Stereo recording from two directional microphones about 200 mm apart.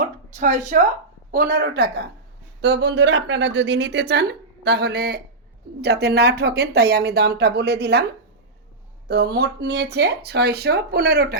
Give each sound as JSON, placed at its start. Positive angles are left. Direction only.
{"t": 0.0, "sound": "a sound", "side_deg": -40}
{"t": 1.3, "sound": "speech", "side_deg": -50}
{"t": 9.0, "sound": "speech", "side_deg": -55}